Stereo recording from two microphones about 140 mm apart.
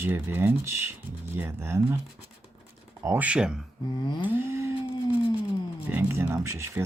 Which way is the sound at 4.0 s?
35° left (ahead or behind).